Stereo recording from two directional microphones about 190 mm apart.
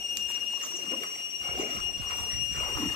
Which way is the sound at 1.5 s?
30° left (ahead or behind).